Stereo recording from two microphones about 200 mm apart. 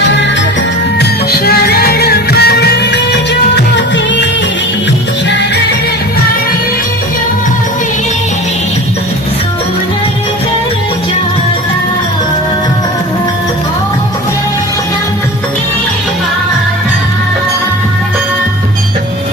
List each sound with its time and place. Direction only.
0.9 s music: 50° left (ahead or behind)